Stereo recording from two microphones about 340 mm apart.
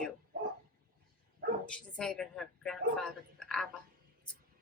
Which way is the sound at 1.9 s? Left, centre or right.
Centre.